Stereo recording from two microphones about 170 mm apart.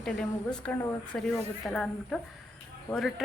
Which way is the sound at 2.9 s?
20° left (ahead or behind).